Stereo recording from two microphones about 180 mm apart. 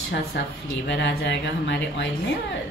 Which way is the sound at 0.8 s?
75° left (ahead or behind).